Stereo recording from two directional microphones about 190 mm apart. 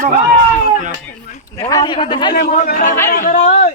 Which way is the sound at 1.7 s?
20° left (ahead or behind).